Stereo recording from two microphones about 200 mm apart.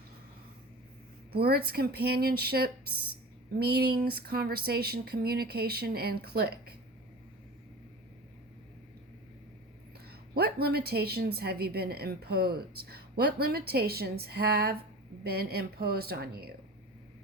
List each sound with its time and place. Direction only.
1.3 s a woman's voice: 50° right (ahead or behind)
10.3 s a woman's voice: 50° right (ahead or behind)